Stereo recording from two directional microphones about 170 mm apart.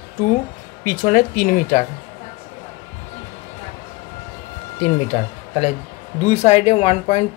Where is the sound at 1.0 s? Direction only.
55° left (ahead or behind).